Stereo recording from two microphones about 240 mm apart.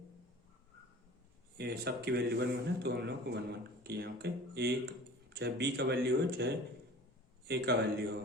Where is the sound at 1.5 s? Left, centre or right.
Right.